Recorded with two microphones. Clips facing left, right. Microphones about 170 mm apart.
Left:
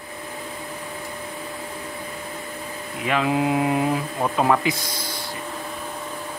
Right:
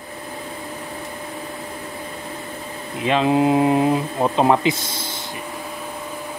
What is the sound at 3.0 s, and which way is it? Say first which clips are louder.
Speech: right 5 dB; 25° right (ahead or behind).